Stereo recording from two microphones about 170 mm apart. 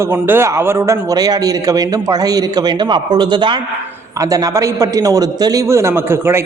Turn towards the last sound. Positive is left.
turn(degrees=-15)  # may be behind; listen again after turning